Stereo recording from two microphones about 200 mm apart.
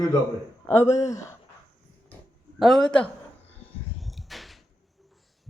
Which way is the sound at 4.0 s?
Centre (ahead or behind).